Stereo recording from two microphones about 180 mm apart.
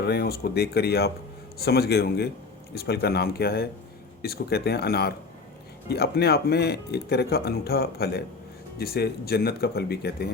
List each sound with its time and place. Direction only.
0.0 s speech: 65° left (ahead or behind)